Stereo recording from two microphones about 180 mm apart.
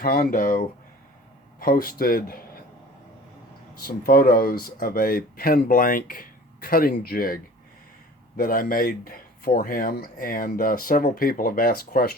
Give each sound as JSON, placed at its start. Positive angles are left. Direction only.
{"t": 0.0, "sound": "speech", "side_deg": 55}
{"t": 3.8, "sound": "speech", "side_deg": 55}
{"t": 8.4, "sound": "speech", "side_deg": 50}